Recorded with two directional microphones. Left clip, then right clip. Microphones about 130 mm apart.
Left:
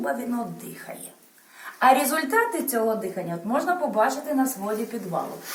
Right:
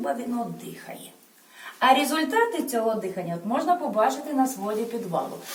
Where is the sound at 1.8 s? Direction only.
Centre (ahead or behind).